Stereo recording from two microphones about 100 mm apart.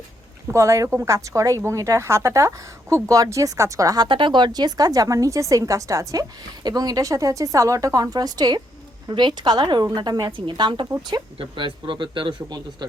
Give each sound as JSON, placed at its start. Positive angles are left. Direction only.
{"t": 0.4, "sound": "speech", "side_deg": -30}
{"t": 4.0, "sound": "a woman's voice", "side_deg": -50}
{"t": 10.3, "sound": "a man's voice", "side_deg": -50}